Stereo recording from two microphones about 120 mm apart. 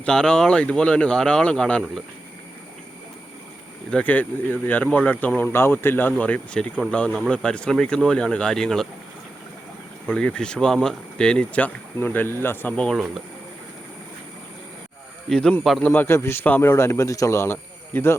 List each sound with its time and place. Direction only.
0.0 s speech: 5° left (ahead or behind)
3.9 s speech: 15° left (ahead or behind)
10.1 s speech: 10° left (ahead or behind)
15.3 s speech: 5° left (ahead or behind)
15.9 s a man's voice: 20° left (ahead or behind)